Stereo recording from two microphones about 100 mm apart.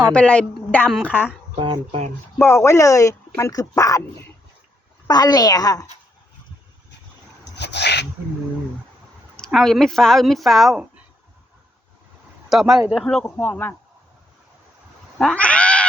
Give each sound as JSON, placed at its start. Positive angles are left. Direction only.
{"t": 0.1, "sound": "a woman's voice", "side_deg": 15}
{"t": 1.5, "sound": "speech", "side_deg": -60}
{"t": 2.4, "sound": "speech", "side_deg": 25}
{"t": 5.0, "sound": "speech", "side_deg": 40}
{"t": 9.5, "sound": "a woman's voice", "side_deg": 0}
{"t": 12.5, "sound": "a woman's voice", "side_deg": -5}
{"t": 13.2, "sound": "speech", "side_deg": 20}
{"t": 15.2, "sound": "cat", "side_deg": 10}